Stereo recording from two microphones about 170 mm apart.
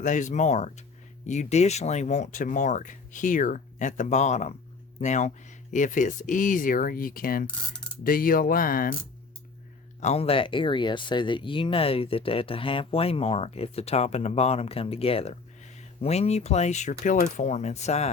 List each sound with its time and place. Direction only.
0.0 s speech: 45° left (ahead or behind)
10.0 s speech: 35° left (ahead or behind)